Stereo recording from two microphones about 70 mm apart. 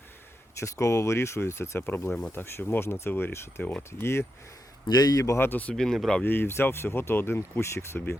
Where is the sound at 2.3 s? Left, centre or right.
Left.